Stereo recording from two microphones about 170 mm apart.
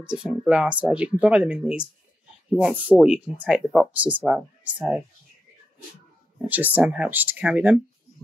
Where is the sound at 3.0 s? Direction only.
5° right (ahead or behind).